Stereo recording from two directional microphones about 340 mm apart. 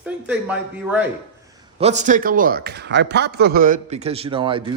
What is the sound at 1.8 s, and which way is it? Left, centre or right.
A man's voice, centre.